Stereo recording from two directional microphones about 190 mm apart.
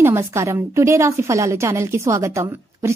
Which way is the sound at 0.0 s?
15° right (ahead or behind).